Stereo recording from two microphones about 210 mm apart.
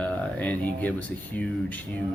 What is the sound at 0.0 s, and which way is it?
Speech, 5° left (ahead or behind).